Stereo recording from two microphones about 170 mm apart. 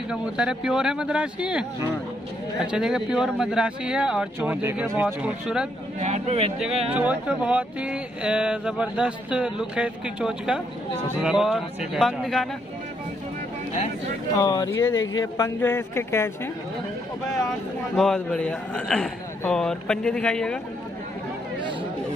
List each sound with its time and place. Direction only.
0.1 s speech: 5° right (ahead or behind)
5.9 s speech: 40° right (ahead or behind)
6.9 s speech: 10° right (ahead or behind)
14.3 s speech: 20° left (ahead or behind)
17.5 s speech: centre (ahead or behind)